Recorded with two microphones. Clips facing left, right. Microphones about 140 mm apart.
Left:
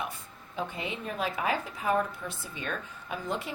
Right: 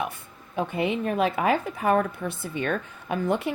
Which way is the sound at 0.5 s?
60° right (ahead or behind).